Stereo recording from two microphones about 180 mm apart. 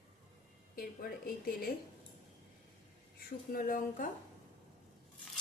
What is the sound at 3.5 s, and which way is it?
Speech, 50° left (ahead or behind).